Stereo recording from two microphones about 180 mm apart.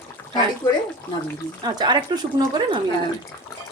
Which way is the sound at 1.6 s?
25° right (ahead or behind).